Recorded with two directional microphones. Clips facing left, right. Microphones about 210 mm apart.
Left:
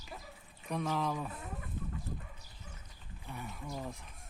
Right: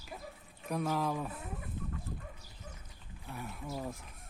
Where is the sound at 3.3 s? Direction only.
Centre (ahead or behind).